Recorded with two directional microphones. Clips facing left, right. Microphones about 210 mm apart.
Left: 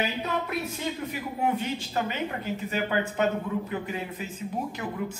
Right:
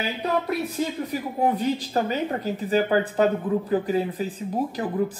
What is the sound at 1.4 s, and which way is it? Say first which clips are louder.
Speech: right 5 dB; 35° right (ahead or behind).